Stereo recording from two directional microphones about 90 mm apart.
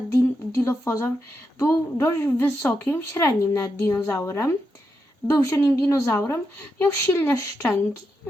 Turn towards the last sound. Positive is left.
turn(degrees=30)  # may be behind; listen again after turning